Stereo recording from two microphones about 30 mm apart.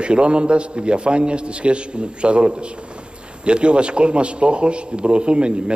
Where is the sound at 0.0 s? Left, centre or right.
Right.